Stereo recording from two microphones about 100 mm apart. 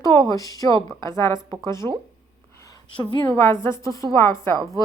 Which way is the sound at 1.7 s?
45° right (ahead or behind).